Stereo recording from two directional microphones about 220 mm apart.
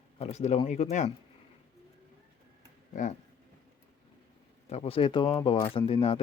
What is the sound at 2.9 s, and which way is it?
Speech, 35° left (ahead or behind).